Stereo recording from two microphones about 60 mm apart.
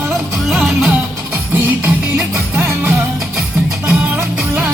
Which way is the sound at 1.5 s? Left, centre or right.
Right.